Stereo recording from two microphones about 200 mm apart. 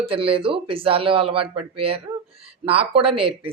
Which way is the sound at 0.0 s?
30° right (ahead or behind).